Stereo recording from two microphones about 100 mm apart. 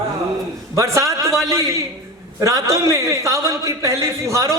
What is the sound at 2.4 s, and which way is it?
A man's voice, 30° right (ahead or behind).